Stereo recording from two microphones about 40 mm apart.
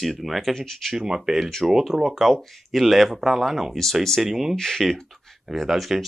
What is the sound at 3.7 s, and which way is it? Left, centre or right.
Speech, centre.